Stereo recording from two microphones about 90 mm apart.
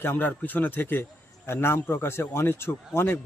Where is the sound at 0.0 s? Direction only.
20° left (ahead or behind).